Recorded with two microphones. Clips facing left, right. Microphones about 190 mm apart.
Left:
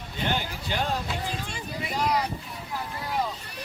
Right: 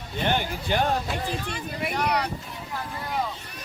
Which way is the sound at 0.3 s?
55° right (ahead or behind).